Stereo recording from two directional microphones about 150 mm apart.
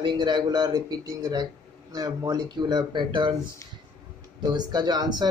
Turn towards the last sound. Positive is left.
turn(degrees=-30)  # may be behind; listen again after turning